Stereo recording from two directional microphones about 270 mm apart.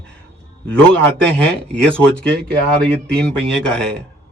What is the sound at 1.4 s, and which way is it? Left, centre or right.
Speech, centre.